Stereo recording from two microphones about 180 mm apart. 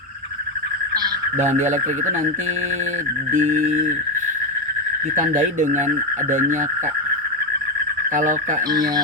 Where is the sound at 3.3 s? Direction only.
45° right (ahead or behind).